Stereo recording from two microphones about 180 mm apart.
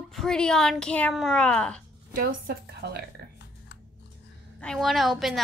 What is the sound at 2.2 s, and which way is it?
Speech, 65° right (ahead or behind).